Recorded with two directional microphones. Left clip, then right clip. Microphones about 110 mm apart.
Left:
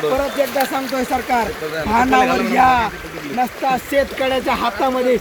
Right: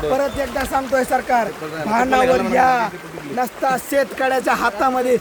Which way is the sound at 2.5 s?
40° right (ahead or behind).